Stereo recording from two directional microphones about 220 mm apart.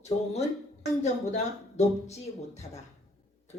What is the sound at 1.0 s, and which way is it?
Speech, 30° left (ahead or behind).